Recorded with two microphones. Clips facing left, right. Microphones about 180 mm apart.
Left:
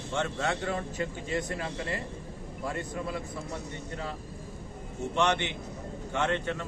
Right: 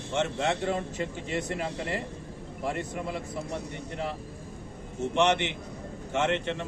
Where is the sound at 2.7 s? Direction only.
15° right (ahead or behind).